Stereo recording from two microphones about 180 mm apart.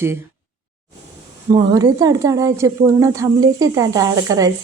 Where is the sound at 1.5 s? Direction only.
20° right (ahead or behind).